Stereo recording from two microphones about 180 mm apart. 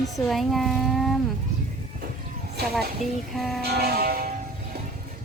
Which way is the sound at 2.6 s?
65° right (ahead or behind).